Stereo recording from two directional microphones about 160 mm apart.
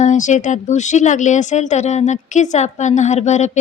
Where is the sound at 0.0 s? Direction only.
50° left (ahead or behind).